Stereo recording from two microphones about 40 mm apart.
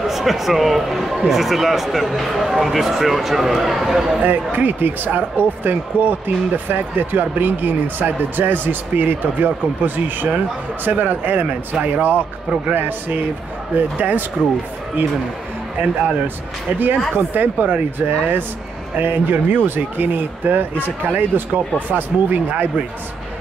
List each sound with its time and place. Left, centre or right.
0.0 s a man's voice: centre
4.2 s speech: right
16.7 s speech: right
17.6 s speech: right